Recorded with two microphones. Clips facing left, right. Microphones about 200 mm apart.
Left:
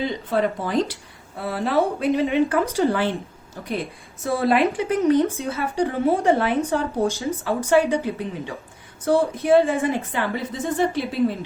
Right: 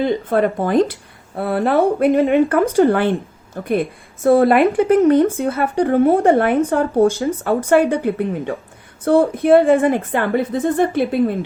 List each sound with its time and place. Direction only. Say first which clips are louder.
0.0 s a woman's voice: right 6 dB; 55° right (ahead or behind)